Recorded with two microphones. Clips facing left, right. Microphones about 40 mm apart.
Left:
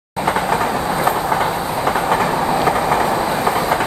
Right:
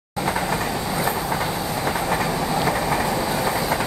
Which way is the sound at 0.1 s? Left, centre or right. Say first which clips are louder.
Left 6 dB; left.